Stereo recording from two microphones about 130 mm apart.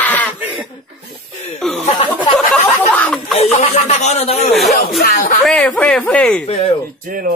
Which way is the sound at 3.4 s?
60° left (ahead or behind).